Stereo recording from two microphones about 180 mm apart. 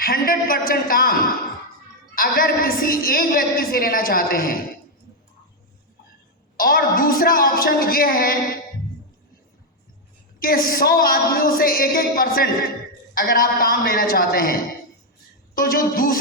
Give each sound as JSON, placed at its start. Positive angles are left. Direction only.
{"t": 0.0, "sound": "a woman's voice", "side_deg": 55}
{"t": 2.1, "sound": "a woman's voice", "side_deg": 55}
{"t": 6.6, "sound": "a woman's voice", "side_deg": 50}
{"t": 10.4, "sound": "a woman's voice", "side_deg": 55}